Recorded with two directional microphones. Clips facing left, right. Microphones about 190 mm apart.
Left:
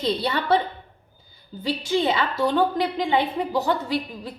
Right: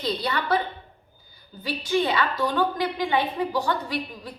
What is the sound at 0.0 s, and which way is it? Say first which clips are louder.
Speech: left 3 dB; 25° left (ahead or behind).